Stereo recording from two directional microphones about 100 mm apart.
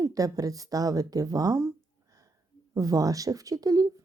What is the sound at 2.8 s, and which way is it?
Speech, 35° right (ahead or behind).